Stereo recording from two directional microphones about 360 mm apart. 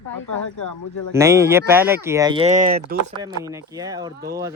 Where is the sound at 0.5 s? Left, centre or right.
Left.